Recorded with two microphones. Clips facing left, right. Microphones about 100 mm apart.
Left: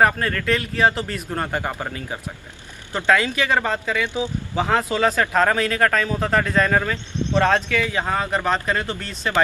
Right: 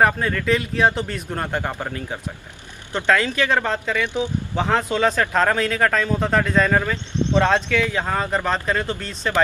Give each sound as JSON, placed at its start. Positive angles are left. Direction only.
{"t": 0.0, "sound": "speech", "side_deg": 0}
{"t": 4.0, "sound": "speech", "side_deg": 15}
{"t": 4.6, "sound": "speech", "side_deg": 5}